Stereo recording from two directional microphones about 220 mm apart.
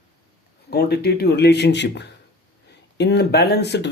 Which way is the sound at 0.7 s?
45° left (ahead or behind).